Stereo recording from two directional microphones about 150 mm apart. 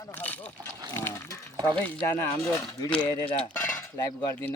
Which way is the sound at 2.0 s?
15° left (ahead or behind).